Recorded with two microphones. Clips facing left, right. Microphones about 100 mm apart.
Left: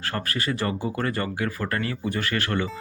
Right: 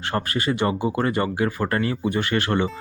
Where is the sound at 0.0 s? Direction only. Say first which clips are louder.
Right 4 dB; 25° right (ahead or behind).